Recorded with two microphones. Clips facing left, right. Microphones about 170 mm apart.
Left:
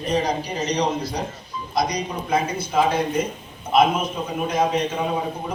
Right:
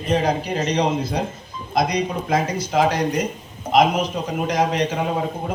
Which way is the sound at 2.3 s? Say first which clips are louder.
Even; 90° right.